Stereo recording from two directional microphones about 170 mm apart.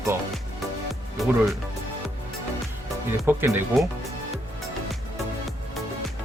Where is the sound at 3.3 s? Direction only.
10° right (ahead or behind).